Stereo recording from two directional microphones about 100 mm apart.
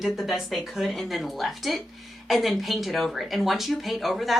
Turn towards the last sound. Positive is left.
turn(degrees=0)  # may be behind; listen again after turning